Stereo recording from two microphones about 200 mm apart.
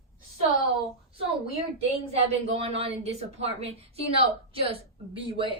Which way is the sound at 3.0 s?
30° right (ahead or behind).